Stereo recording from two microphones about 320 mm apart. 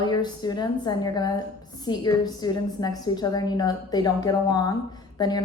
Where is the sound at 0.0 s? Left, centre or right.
Centre.